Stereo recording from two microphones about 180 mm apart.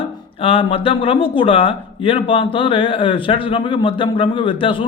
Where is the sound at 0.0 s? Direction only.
30° left (ahead or behind).